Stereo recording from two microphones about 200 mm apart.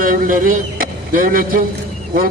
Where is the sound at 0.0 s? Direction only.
45° right (ahead or behind).